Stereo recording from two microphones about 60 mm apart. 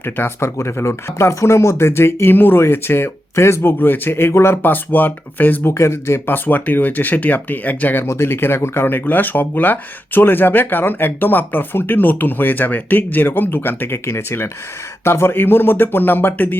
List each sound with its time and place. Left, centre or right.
0.0 s speech: left
5.6 s speech: left